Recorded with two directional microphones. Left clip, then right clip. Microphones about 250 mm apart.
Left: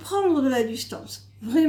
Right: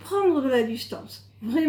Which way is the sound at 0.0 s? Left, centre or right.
Left.